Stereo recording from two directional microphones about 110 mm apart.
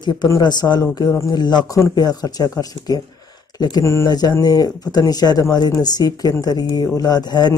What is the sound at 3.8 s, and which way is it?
Speech, 30° left (ahead or behind).